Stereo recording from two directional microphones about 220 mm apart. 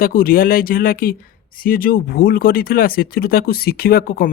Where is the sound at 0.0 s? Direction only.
40° left (ahead or behind).